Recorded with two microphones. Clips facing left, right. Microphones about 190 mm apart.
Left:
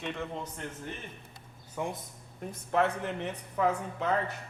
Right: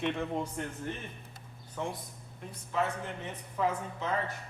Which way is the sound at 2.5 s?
65° left (ahead or behind).